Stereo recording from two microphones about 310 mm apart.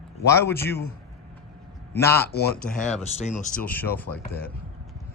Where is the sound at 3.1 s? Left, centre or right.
Left.